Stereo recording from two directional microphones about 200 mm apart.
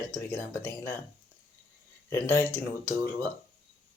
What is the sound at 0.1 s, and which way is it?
Speech, 10° left (ahead or behind).